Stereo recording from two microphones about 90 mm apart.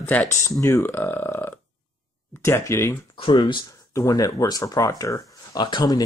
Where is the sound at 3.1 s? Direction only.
70° left (ahead or behind).